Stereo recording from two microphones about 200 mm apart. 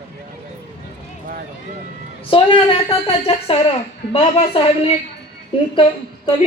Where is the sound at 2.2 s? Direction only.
25° left (ahead or behind).